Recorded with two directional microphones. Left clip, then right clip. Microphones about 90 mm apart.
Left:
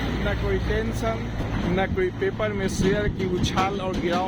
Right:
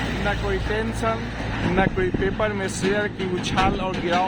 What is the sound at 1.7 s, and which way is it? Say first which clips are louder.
Speech: right 3 dB; 15° right (ahead or behind).